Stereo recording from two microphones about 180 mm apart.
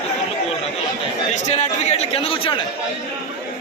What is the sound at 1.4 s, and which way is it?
A man's voice, 40° left (ahead or behind).